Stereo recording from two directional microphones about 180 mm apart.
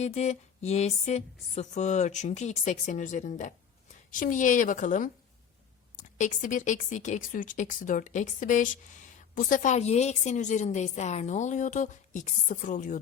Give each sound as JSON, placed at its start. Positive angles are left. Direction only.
{"t": 0.0, "sound": "a woman's voice", "side_deg": 40}
{"t": 6.1, "sound": "a woman's voice", "side_deg": 45}